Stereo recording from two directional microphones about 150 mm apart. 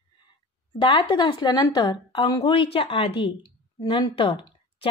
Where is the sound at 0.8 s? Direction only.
35° left (ahead or behind).